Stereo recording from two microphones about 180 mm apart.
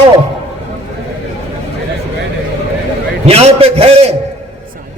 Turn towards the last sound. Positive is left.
turn(degrees=-35)  # may be behind; listen again after turning